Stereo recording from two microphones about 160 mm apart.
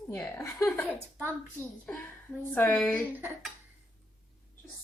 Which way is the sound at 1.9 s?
10° left (ahead or behind).